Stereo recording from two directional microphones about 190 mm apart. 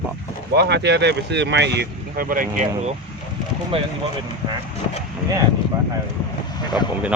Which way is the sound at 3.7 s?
30° right (ahead or behind).